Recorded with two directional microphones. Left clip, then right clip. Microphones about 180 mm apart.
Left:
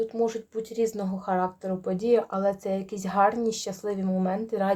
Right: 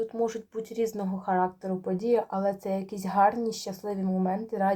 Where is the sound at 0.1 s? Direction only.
10° left (ahead or behind).